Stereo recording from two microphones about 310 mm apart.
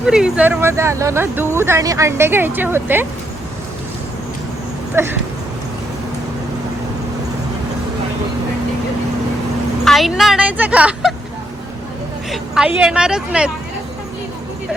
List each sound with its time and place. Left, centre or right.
0.0 s speech: centre
5.0 s speech: centre
9.8 s speech: centre
12.3 s speech: centre